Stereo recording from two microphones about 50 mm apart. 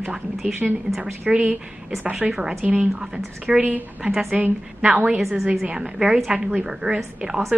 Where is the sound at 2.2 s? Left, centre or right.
Centre.